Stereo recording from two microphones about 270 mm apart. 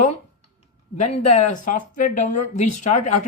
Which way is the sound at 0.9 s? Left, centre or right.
Left.